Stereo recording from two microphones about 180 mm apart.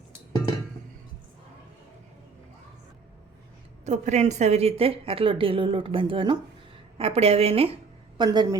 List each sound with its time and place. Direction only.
3.8 s a woman's voice: 40° right (ahead or behind); by 8.5 s 25° right (ahead or behind)